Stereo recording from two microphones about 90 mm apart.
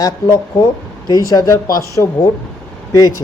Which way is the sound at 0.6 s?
40° left (ahead or behind).